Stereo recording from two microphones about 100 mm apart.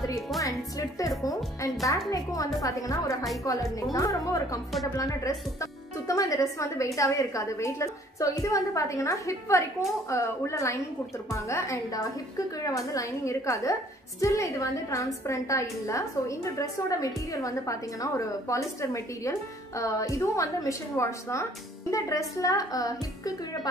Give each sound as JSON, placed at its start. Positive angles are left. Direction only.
{"t": 0.4, "sound": "a woman's voice", "side_deg": 35}